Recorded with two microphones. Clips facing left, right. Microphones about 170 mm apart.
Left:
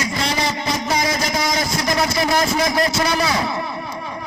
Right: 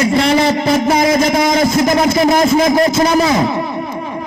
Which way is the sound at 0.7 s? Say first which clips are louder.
Right 10 dB; 55° right (ahead or behind).